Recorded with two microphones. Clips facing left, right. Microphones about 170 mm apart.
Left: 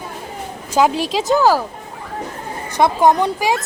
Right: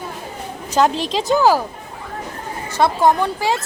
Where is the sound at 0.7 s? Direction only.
10° left (ahead or behind).